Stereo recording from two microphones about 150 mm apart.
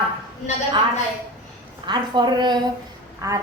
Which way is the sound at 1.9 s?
30° right (ahead or behind).